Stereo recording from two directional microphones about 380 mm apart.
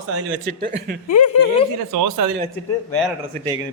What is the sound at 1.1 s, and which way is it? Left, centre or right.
Speech, left.